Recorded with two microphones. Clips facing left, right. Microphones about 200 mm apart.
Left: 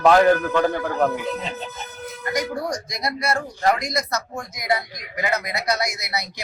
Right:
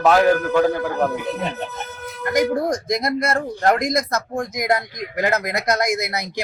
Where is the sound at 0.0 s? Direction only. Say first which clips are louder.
Even; 5° right (ahead or behind).